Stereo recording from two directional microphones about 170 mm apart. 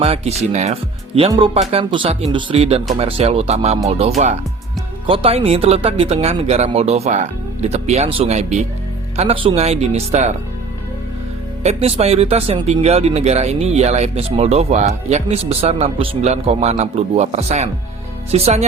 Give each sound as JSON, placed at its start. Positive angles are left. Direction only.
{"t": 0.0, "sound": "speech", "side_deg": -40}
{"t": 11.6, "sound": "speech", "side_deg": -35}